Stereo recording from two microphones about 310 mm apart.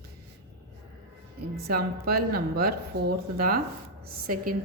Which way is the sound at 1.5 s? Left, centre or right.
Right.